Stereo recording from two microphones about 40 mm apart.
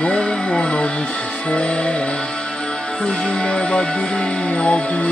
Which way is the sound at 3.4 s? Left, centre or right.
Left.